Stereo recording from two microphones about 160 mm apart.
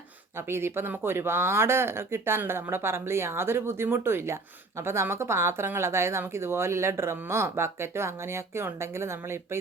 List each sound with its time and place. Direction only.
0.3 s speech: 15° right (ahead or behind)